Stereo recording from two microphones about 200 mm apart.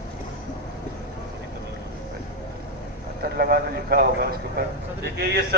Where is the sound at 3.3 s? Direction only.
50° right (ahead or behind).